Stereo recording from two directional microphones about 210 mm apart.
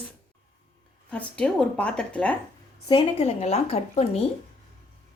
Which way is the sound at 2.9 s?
25° left (ahead or behind).